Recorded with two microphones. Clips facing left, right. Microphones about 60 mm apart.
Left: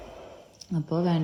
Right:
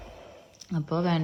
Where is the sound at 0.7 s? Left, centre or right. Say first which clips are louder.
Left 1 dB; right.